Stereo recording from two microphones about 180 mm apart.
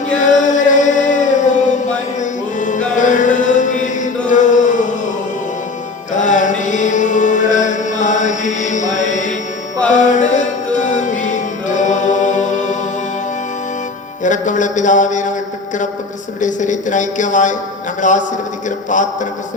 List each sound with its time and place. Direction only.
0.2 s music: 45° left (ahead or behind)
2.6 s chant: 45° left (ahead or behind)
6.1 s chant: 45° left (ahead or behind)
9.9 s music: 45° left (ahead or behind)
14.3 s a sound: 45° left (ahead or behind)
16.4 s speech: 45° left (ahead or behind)